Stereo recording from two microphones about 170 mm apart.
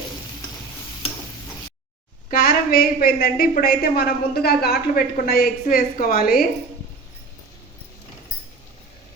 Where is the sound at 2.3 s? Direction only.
60° left (ahead or behind).